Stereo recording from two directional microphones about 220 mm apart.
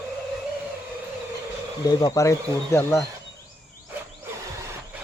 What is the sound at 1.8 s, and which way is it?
Speech, 15° left (ahead or behind).